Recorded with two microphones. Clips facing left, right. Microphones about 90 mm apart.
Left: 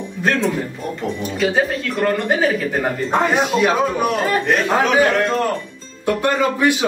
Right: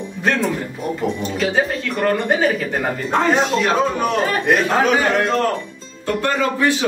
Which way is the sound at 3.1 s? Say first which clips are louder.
Right 1 dB; 10° left (ahead or behind).